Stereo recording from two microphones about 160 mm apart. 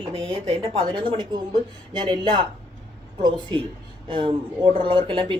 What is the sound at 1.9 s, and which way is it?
Speech, 30° right (ahead or behind).